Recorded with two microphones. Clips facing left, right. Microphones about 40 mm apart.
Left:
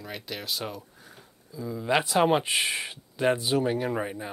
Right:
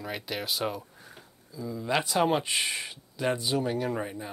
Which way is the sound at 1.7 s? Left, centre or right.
Centre.